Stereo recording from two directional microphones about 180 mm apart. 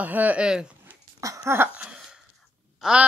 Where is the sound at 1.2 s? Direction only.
15° right (ahead or behind).